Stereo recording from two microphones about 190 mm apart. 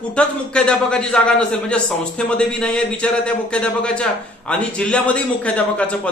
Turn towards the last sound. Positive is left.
turn(degrees=5)  # may be behind; listen again after turning